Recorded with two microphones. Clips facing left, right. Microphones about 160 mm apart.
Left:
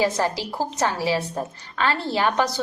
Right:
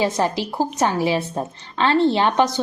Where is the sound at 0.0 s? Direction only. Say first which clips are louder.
Right 2 dB; 20° right (ahead or behind).